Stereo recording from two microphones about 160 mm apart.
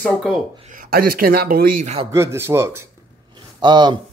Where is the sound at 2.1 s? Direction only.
15° right (ahead or behind).